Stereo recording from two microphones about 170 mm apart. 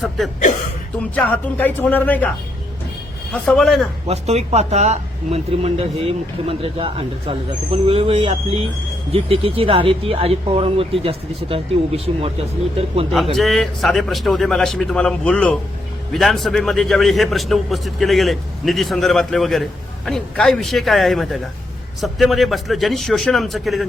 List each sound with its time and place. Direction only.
0.9 s speech: 10° left (ahead or behind)
3.3 s a man's voice: 5° left (ahead or behind)
4.0 s speech: 40° right (ahead or behind)
13.3 s a man's voice: centre (ahead or behind)